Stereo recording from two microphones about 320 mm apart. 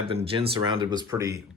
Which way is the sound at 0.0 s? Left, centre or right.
Centre.